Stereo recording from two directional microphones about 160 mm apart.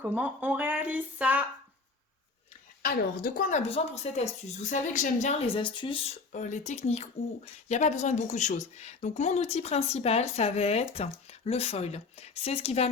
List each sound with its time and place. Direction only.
0.0 s speech: 10° right (ahead or behind)
2.8 s speech: 60° left (ahead or behind)
3.7 s a woman's voice: 40° left (ahead or behind)
6.3 s a woman's voice: 50° left (ahead or behind)